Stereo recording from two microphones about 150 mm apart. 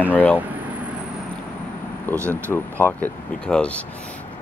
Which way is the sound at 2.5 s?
10° left (ahead or behind).